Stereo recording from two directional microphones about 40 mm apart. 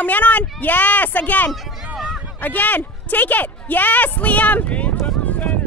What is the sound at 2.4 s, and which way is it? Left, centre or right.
A woman's voice, left.